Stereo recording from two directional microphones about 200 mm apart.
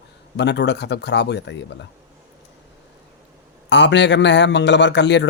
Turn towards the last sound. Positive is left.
turn(degrees=60)  # may be behind; listen again after turning